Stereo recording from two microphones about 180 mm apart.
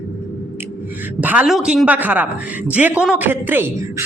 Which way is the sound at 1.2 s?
10° right (ahead or behind).